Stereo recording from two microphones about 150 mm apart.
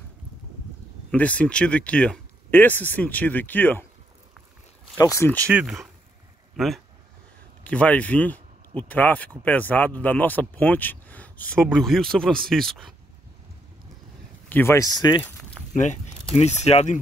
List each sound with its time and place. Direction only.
1.1 s speech: 10° left (ahead or behind)
4.9 s speech: 20° left (ahead or behind)
5.5 s speech: 5° right (ahead or behind)
14.5 s speech: 15° left (ahead or behind)
15.7 s speech: 55° left (ahead or behind)